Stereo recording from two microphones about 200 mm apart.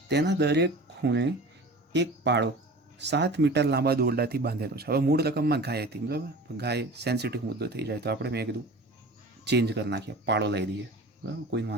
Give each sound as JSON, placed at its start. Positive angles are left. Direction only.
{"t": 0.1, "sound": "speech", "side_deg": -55}